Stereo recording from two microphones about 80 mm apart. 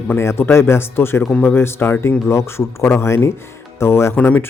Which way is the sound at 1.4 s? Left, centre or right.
Left.